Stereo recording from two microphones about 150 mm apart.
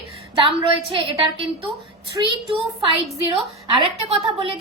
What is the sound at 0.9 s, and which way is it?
Speech, 35° right (ahead or behind).